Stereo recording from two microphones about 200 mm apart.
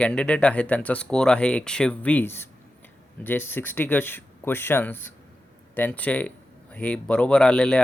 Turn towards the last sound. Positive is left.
turn(degrees=5)  # may be behind; listen again after turning